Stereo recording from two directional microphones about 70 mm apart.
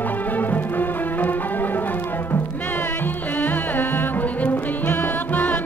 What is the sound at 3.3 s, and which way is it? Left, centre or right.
Music, left.